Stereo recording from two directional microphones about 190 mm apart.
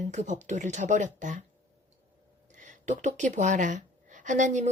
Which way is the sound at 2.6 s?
40° right (ahead or behind).